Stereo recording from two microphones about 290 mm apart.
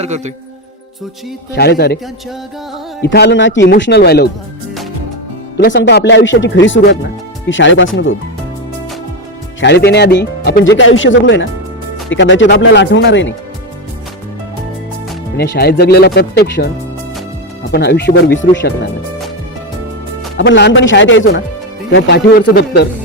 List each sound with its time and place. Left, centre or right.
1.5 s speech: left
3.0 s speech: left
5.5 s speech: left
9.6 s speech: left
15.4 s speech: left
17.7 s speech: left
20.3 s speech: left